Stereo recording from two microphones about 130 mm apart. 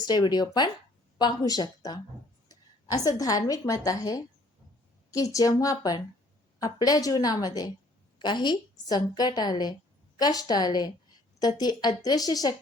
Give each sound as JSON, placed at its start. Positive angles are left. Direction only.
{"t": 0.0, "sound": "a woman's voice", "side_deg": 30}